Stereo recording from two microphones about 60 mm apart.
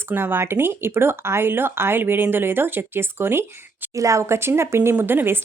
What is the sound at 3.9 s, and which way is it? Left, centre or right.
Speech, right.